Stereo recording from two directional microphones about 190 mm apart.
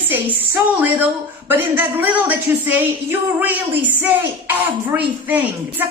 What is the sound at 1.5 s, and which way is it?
A woman's voice, 10° right (ahead or behind).